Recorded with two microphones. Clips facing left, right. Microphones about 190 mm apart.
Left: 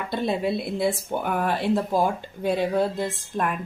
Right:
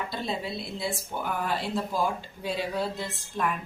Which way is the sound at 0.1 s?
55° left (ahead or behind).